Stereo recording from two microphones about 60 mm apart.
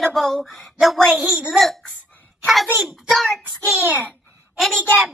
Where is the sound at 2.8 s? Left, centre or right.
Centre.